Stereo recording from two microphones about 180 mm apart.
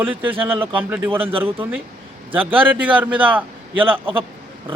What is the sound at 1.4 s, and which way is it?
A man's voice, 10° right (ahead or behind).